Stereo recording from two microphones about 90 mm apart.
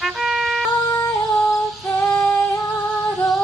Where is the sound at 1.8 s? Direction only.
20° left (ahead or behind).